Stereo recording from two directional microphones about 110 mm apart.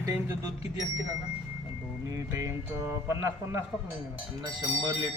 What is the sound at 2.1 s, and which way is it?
Speech, 30° right (ahead or behind).